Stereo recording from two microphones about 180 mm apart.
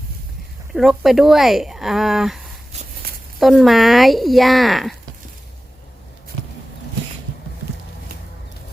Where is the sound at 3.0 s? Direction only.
55° right (ahead or behind).